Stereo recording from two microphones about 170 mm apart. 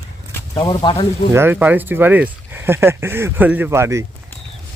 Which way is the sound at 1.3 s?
10° right (ahead or behind).